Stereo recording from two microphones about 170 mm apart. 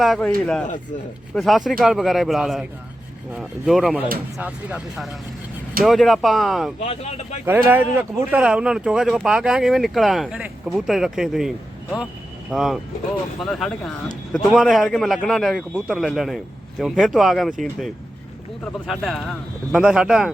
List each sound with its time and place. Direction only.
0.0 s speech: centre (ahead or behind)
6.7 s speech: 35° left (ahead or behind)
7.4 s speech: 10° right (ahead or behind)